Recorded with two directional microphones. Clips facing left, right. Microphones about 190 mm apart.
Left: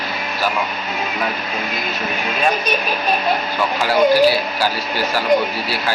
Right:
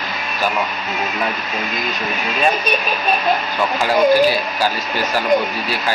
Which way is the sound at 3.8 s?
15° right (ahead or behind).